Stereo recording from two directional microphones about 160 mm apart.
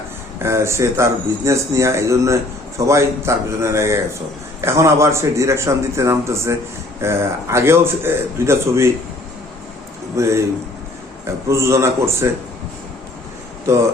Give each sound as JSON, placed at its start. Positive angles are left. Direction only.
{"t": 0.3, "sound": "a man's voice", "side_deg": -15}
{"t": 10.2, "sound": "a man's voice", "side_deg": -20}
{"t": 11.4, "sound": "a man's voice", "side_deg": -15}
{"t": 13.7, "sound": "a man's voice", "side_deg": -20}